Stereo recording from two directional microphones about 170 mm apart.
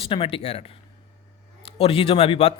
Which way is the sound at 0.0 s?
30° left (ahead or behind).